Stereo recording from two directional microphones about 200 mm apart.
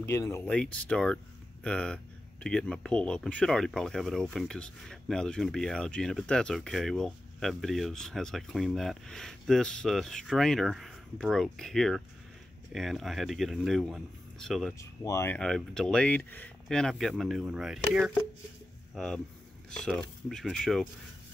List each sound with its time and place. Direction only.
0.0 s speech: 15° left (ahead or behind)
14.8 s speech: 15° left (ahead or behind)
15.3 s speech: centre (ahead or behind)